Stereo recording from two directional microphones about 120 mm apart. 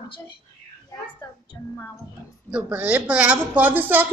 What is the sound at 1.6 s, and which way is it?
Music, 30° left (ahead or behind).